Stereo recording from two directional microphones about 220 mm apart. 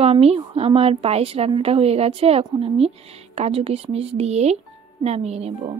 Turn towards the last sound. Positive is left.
turn(degrees=-30)  # may be behind; listen again after turning